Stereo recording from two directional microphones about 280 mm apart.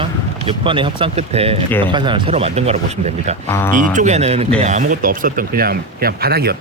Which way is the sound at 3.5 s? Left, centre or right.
Centre.